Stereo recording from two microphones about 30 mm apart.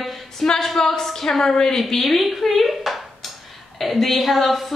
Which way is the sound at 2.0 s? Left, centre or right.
Centre.